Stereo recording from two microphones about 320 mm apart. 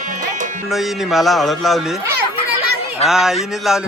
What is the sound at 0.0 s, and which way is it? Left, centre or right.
Music, right.